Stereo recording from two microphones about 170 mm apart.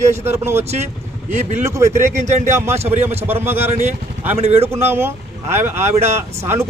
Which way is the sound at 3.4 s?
15° right (ahead or behind).